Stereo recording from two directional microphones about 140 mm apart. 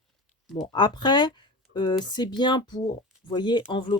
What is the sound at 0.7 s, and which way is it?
Speech, 30° left (ahead or behind).